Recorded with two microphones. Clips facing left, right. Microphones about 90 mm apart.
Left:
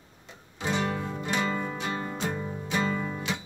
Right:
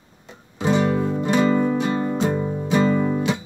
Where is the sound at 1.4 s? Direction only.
50° right (ahead or behind).